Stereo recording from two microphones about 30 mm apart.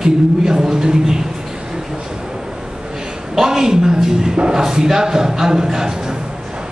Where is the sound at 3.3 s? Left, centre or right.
Centre.